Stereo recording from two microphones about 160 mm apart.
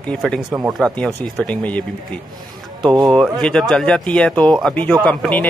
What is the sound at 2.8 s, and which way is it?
Speech, 25° right (ahead or behind).